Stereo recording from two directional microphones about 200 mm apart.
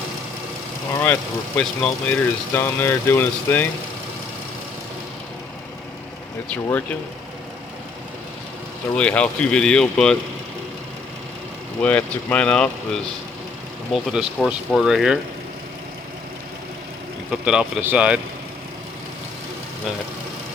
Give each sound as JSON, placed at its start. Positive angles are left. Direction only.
{"t": 1.0, "sound": "speech", "side_deg": 5}
{"t": 6.5, "sound": "speech", "side_deg": 10}
{"t": 9.0, "sound": "speech", "side_deg": 5}
{"t": 11.8, "sound": "speech", "side_deg": 5}
{"t": 17.4, "sound": "speech", "side_deg": -5}